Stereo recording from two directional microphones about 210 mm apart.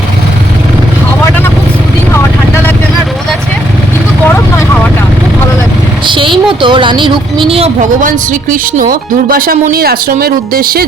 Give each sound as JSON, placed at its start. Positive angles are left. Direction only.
{"t": 4.3, "sound": "vehicle", "side_deg": 10}
{"t": 6.1, "sound": "a sound", "side_deg": -25}
{"t": 6.6, "sound": "a woman's voice", "side_deg": -25}